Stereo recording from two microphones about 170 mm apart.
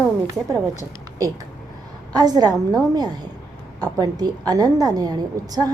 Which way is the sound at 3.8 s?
20° right (ahead or behind).